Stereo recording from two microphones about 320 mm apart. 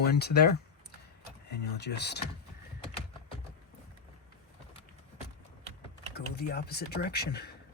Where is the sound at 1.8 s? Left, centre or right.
Left.